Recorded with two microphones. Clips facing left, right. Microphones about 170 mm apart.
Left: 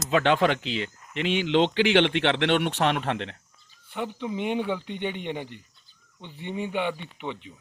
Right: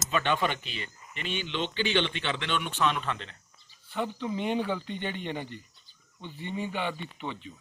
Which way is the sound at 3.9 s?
15° left (ahead or behind).